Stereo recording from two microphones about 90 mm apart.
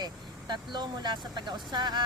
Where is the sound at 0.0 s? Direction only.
50° right (ahead or behind).